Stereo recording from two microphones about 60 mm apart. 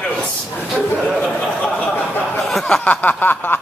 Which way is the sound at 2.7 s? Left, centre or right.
Left.